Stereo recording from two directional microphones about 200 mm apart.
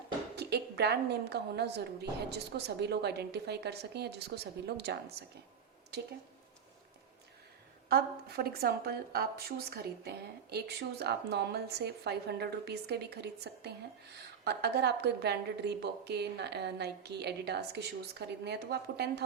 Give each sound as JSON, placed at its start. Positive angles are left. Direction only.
{"t": 0.3, "sound": "a woman's voice", "side_deg": -55}
{"t": 7.9, "sound": "a woman's voice", "side_deg": -50}